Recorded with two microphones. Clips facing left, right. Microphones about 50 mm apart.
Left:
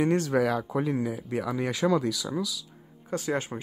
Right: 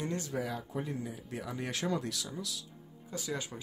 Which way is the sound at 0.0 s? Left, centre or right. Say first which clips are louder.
Left 12 dB; left.